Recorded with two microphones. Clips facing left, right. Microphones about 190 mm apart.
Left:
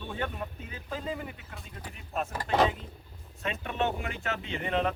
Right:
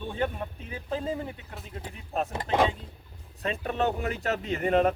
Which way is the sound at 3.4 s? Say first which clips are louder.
Right 3 dB; 35° right (ahead or behind).